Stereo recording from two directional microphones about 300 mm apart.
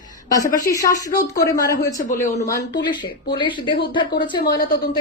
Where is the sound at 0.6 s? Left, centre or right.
Centre.